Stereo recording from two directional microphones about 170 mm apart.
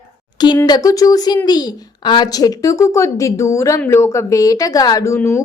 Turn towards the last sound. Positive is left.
turn(degrees=15)  # may be behind; listen again after turning